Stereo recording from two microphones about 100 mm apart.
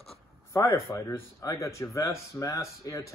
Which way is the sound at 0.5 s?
30° left (ahead or behind).